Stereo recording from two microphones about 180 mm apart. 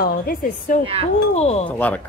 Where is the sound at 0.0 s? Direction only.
50° left (ahead or behind).